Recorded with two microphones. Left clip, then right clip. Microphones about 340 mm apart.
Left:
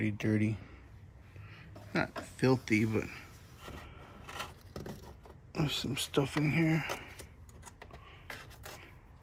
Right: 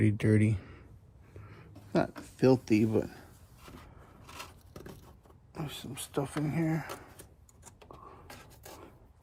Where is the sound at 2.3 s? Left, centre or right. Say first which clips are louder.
Right 4 dB; centre.